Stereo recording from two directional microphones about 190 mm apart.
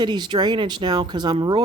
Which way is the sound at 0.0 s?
25° right (ahead or behind).